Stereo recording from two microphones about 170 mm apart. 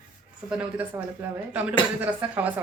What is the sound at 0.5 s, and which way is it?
Speech, 10° right (ahead or behind).